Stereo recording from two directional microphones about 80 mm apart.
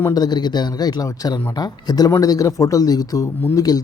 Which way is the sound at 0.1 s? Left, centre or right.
Left.